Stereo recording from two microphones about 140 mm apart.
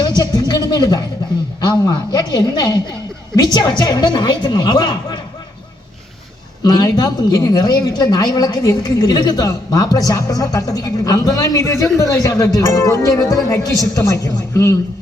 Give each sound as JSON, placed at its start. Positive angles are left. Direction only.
{"t": 0.2, "sound": "a woman's voice", "side_deg": 30}
{"t": 6.6, "sound": "a woman's voice", "side_deg": 30}